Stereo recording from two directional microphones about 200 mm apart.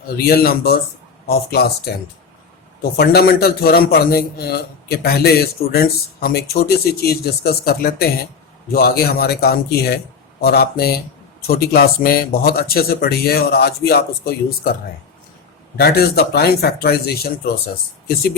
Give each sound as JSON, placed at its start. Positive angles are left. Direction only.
{"t": 0.2, "sound": "a man's voice", "side_deg": 50}
{"t": 3.0, "sound": "a man's voice", "side_deg": 50}
{"t": 15.8, "sound": "a man's voice", "side_deg": 50}